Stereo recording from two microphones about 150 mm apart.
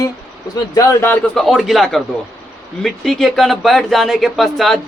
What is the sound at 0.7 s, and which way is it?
Speech, 25° left (ahead or behind).